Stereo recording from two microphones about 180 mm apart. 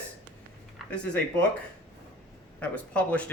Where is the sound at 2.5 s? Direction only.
5° left (ahead or behind).